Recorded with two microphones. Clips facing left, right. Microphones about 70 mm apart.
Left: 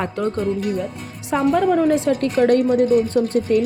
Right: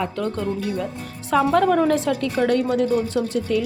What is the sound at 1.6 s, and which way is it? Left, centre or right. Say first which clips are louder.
Speech: left 1 dB; centre.